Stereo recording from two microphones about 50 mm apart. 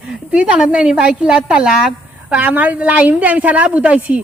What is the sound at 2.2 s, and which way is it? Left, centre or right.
A woman's voice, right.